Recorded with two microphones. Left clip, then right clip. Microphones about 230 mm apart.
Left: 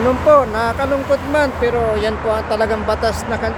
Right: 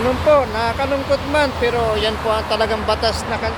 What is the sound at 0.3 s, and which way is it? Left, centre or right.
Speech, centre.